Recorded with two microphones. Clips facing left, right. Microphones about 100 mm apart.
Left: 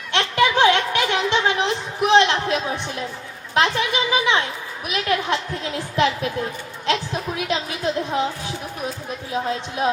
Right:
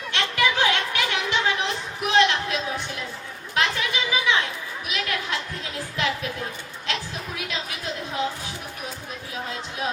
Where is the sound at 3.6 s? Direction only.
30° left (ahead or behind).